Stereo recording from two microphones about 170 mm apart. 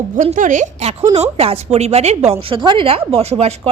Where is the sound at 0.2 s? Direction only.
50° right (ahead or behind).